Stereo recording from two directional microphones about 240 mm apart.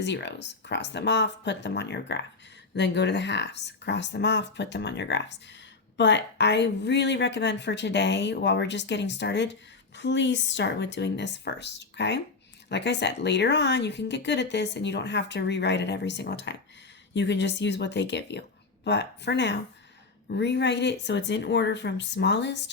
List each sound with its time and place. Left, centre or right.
0.0 s speech: left